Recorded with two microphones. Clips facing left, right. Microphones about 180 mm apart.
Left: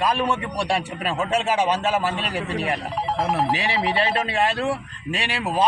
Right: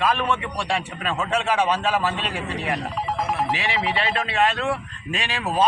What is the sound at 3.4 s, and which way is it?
A man's voice, 35° left (ahead or behind).